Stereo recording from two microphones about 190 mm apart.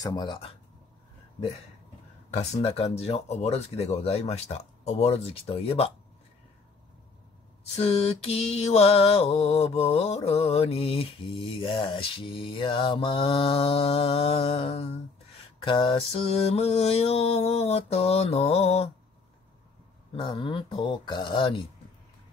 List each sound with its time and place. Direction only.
0.0 s speech: 20° left (ahead or behind)
2.3 s mantra: 35° left (ahead or behind)
7.7 s mantra: 35° left (ahead or behind)
20.2 s speech: 25° left (ahead or behind)